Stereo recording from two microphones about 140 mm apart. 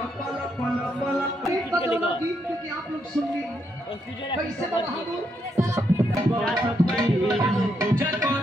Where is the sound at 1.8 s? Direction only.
40° left (ahead or behind).